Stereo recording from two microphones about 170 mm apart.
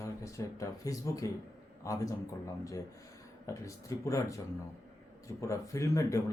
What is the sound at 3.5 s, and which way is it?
A man's voice, 20° left (ahead or behind).